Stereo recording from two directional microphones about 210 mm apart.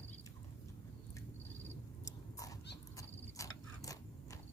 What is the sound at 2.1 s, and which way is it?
Cat, 15° left (ahead or behind).